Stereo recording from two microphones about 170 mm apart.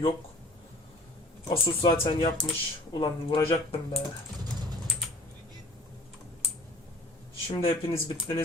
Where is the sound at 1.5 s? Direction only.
30° left (ahead or behind).